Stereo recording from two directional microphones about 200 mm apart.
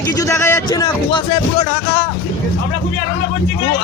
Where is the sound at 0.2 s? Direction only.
15° left (ahead or behind).